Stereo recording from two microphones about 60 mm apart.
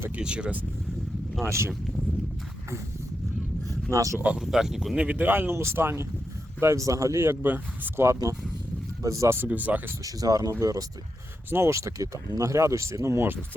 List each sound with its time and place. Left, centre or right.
0.2 s speech: centre
1.5 s speech: right
3.9 s speech: right
4.4 s speech: centre
4.9 s speech: right
5.2 s speech: right
6.7 s speech: right
7.4 s speech: right
7.9 s speech: right
9.0 s speech: right
9.5 s speech: right
10.0 s speech: right
10.5 s speech: right
11.5 s speech: right